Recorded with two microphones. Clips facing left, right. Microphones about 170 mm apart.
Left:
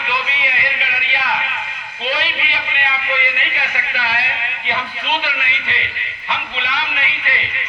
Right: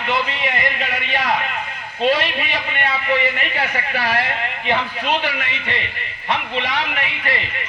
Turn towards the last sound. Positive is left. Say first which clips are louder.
# right 2 dB
turn(degrees=-45)  # may be behind; listen again after turning